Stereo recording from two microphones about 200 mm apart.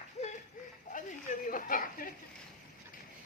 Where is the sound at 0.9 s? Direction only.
45° left (ahead or behind).